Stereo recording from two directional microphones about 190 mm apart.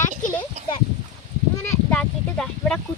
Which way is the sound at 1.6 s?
10° left (ahead or behind).